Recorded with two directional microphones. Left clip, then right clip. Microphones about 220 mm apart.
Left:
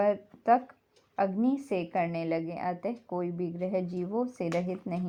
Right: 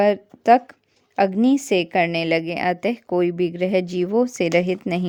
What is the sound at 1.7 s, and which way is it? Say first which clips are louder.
Speech: right 11 dB; 50° right (ahead or behind).